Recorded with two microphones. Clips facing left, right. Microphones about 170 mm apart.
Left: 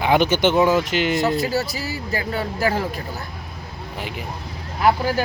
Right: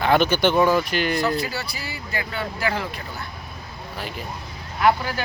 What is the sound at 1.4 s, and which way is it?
Speech, 40° left (ahead or behind).